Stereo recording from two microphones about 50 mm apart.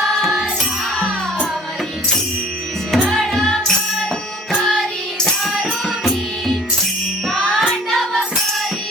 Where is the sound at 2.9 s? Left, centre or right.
Centre.